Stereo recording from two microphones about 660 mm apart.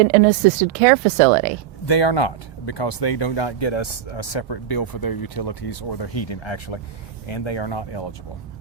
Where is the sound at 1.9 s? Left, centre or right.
Left.